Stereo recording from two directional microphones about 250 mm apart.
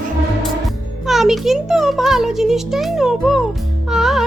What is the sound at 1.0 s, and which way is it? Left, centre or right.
A child's voice, centre.